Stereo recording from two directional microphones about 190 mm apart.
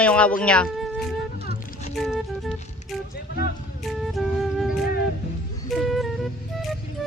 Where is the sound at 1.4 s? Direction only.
50° left (ahead or behind).